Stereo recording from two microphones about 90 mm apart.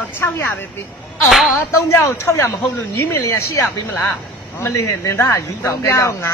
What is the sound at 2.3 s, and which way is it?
Speech, 35° left (ahead or behind).